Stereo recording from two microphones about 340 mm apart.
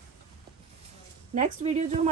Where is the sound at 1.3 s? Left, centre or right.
Centre.